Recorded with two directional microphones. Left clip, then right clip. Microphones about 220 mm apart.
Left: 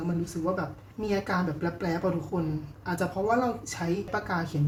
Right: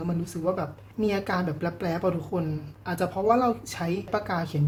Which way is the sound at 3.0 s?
35° right (ahead or behind).